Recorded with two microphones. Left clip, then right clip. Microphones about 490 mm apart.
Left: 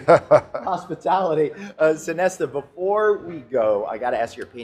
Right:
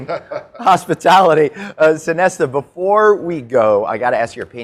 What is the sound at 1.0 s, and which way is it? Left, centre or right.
Speech, right.